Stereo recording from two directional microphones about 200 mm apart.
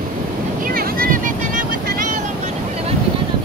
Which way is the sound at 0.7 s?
45° right (ahead or behind).